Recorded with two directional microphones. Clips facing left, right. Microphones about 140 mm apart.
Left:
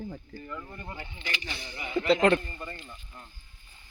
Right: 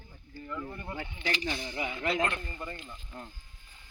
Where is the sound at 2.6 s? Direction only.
15° right (ahead or behind).